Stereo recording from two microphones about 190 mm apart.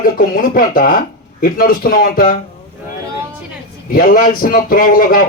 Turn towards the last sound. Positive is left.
turn(degrees=50)  # may be behind; listen again after turning